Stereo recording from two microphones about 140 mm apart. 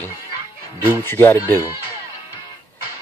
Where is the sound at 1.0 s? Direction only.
15° left (ahead or behind).